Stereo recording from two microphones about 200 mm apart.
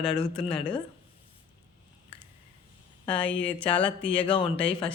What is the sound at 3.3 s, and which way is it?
Speech, 25° left (ahead or behind).